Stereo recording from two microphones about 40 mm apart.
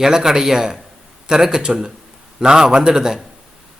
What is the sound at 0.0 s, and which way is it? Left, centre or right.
A man's voice, centre.